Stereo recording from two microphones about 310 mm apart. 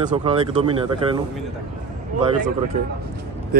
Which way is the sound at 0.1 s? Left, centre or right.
Centre.